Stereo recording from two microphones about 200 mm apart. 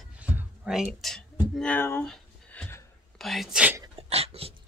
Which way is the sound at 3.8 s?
30° right (ahead or behind).